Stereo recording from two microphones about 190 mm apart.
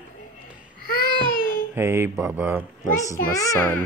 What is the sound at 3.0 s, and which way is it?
Speech, 15° left (ahead or behind).